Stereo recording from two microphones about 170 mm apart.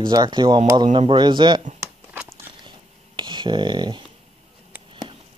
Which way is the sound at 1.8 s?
10° right (ahead or behind).